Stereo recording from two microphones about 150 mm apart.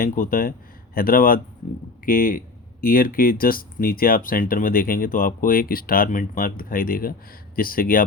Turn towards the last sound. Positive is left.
turn(degrees=70)  # may be behind; listen again after turning